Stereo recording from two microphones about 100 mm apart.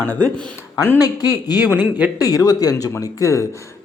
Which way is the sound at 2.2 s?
40° left (ahead or behind).